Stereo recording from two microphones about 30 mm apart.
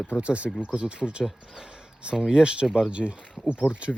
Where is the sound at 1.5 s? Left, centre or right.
Right.